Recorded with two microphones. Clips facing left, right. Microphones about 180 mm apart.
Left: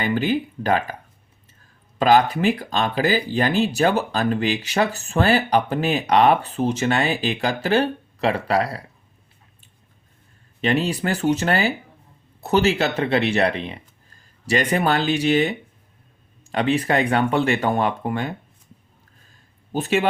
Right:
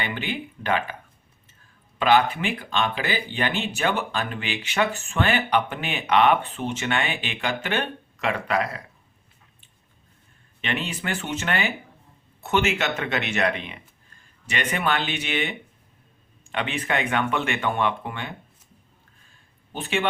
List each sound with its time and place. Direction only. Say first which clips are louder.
0.0 s speech: left 9 dB; 40° left (ahead or behind)
2.0 s speech: left 3 dB; 40° left (ahead or behind)
10.6 s speech: left 8 dB; 35° left (ahead or behind)
19.7 s speech: left 6 dB; 40° left (ahead or behind)